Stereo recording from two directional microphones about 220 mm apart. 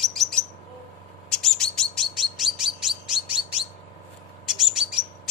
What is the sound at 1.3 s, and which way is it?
Bird, centre (ahead or behind).